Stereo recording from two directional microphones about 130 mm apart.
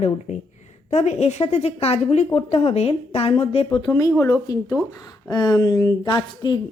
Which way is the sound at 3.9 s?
20° left (ahead or behind).